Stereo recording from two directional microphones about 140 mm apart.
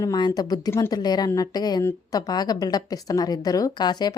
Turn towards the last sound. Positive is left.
turn(degrees=30)  # may be behind; listen again after turning